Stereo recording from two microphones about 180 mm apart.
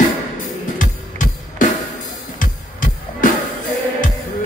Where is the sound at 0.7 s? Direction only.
45° left (ahead or behind).